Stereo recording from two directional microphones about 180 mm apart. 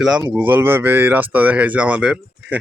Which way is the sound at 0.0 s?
5° right (ahead or behind).